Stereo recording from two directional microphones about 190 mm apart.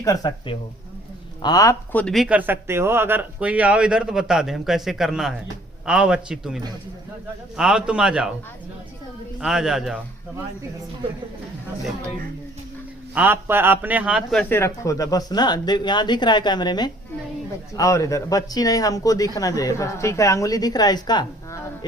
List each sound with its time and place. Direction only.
0.0 s a man's voice: 20° left (ahead or behind); by 8.3 s 5° right (ahead or behind)
9.4 s a man's voice: 5° right (ahead or behind)
13.1 s a man's voice: 10° right (ahead or behind)
14.5 s speech: 15° left (ahead or behind)